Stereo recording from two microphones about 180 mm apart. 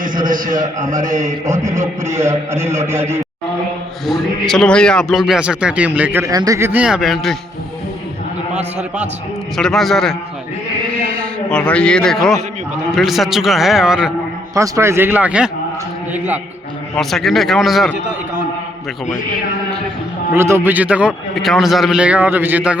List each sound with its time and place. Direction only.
0.3 s a man's voice: 45° right (ahead or behind)
2.0 s a man's voice: 15° right (ahead or behind)
4.0 s a man's voice: centre (ahead or behind)
9.6 s a man's voice: centre (ahead or behind)
14.5 s a man's voice: 15° right (ahead or behind)
16.9 s a man's voice: centre (ahead or behind)
20.3 s a man's voice: 15° right (ahead or behind)